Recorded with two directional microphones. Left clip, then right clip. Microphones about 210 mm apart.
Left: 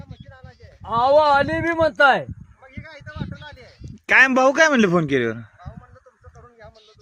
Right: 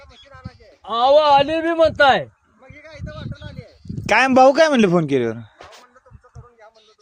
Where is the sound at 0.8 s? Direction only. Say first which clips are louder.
Right 2 dB; centre (ahead or behind).